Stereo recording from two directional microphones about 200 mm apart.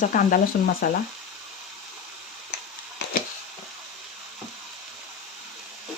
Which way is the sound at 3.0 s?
55° left (ahead or behind).